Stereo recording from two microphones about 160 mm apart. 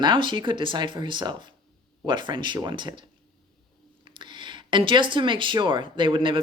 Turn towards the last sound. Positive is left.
turn(degrees=-30)  # may be behind; listen again after turning